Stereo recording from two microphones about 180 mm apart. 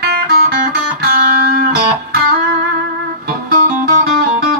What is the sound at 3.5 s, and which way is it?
Music, 55° right (ahead or behind).